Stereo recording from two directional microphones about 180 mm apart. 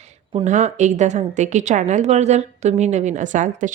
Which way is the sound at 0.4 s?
45° right (ahead or behind).